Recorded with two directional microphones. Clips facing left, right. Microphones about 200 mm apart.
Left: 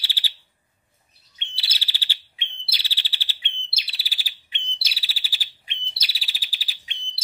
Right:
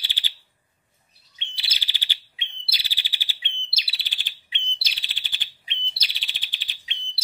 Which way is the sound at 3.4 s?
55° left (ahead or behind).